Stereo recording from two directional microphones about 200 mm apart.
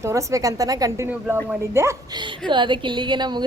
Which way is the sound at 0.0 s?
15° right (ahead or behind).